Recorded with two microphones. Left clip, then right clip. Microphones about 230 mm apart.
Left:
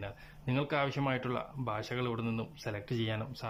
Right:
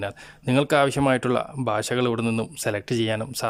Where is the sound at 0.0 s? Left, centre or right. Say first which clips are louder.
Right 13 dB; right.